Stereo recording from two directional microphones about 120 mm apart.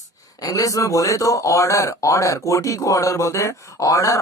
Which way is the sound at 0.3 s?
30° left (ahead or behind).